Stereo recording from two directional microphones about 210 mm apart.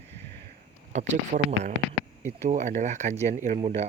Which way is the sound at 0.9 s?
35° right (ahead or behind).